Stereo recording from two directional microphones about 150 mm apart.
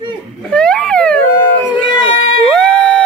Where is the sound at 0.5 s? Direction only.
5° left (ahead or behind).